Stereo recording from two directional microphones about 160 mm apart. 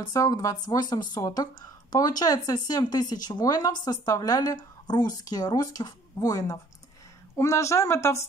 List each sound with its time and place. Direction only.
0.0 s speech: 20° left (ahead or behind)